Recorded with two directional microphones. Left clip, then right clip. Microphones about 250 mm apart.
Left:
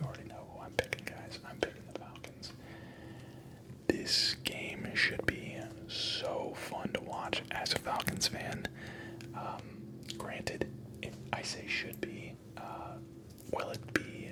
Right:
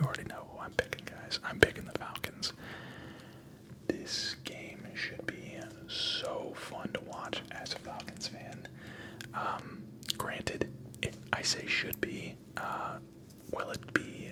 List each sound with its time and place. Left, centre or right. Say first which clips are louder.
0.0 s whispering: right 7 dB; right
0.8 s whispering: right 1 dB; centre
1.5 s whispering: right 11 dB; right
3.8 s whispering: left 5 dB; centre
4.8 s whispering: left 9 dB; left
5.4 s whispering: left 1 dB; centre
7.9 s whispering: left 8 dB; left
9.3 s gasp: right 7 dB; centre
10.2 s whispering: right 1 dB; centre
13.7 s whispering: right 2 dB; centre